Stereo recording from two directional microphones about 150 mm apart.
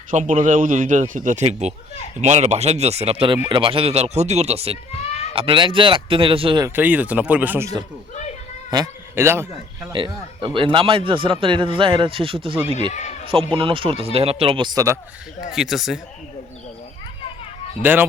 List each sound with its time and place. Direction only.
0.1 s speech: 60° right (ahead or behind); by 6.6 s 35° right (ahead or behind)
6.6 s speech: 15° right (ahead or behind)
8.7 s speech: 20° right (ahead or behind)
9.9 s speech: 35° right (ahead or behind)
12.9 s speech: 50° left (ahead or behind)
13.3 s speech: 35° right (ahead or behind)
15.5 s speech: centre (ahead or behind)
17.8 s speech: 15° right (ahead or behind)